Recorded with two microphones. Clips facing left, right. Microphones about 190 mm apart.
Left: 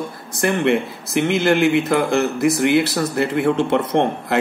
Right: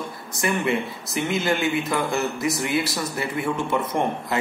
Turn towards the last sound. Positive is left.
turn(degrees=70)  # may be behind; listen again after turning